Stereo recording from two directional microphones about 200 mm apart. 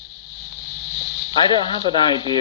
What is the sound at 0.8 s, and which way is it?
Snake, centre (ahead or behind).